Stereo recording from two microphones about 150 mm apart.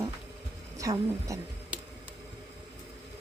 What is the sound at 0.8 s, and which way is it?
Speech, 20° right (ahead or behind).